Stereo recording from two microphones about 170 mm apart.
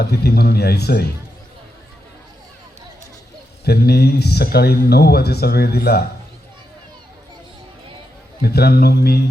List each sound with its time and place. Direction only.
0.0 s speech: 70° left (ahead or behind)
3.6 s speech: 70° left (ahead or behind)
8.4 s speech: 70° left (ahead or behind)